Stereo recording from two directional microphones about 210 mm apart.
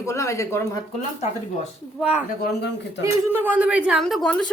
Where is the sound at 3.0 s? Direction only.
10° right (ahead or behind).